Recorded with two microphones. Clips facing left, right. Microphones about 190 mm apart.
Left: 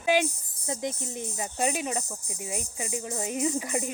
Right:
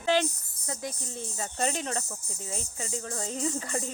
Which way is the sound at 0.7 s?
20° left (ahead or behind).